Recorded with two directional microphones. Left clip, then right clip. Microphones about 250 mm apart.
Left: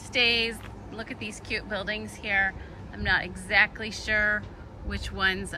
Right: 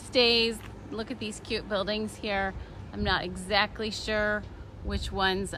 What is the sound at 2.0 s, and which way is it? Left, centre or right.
Speech, centre.